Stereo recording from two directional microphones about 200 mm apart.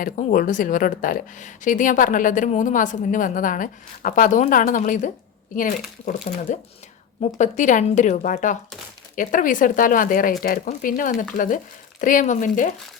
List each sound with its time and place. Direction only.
0.0 s speech: 40° left (ahead or behind)
6.3 s speech: 40° left (ahead or behind)